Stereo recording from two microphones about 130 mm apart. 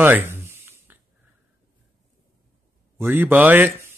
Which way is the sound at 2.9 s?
15° right (ahead or behind).